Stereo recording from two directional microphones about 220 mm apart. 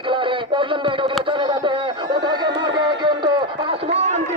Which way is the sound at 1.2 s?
20° right (ahead or behind).